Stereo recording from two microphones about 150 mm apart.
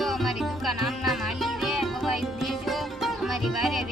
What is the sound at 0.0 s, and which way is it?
Music, centre (ahead or behind).